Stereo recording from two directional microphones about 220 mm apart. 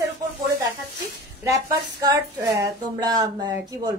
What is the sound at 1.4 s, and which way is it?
A woman's voice, 15° right (ahead or behind).